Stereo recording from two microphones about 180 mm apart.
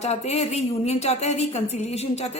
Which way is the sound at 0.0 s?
35° left (ahead or behind).